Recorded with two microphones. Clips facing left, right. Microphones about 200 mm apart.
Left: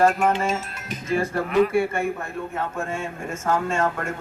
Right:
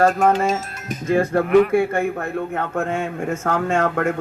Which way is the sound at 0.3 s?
40° right (ahead or behind).